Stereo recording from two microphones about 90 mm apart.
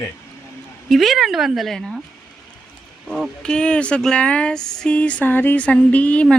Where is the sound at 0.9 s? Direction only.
Centre (ahead or behind).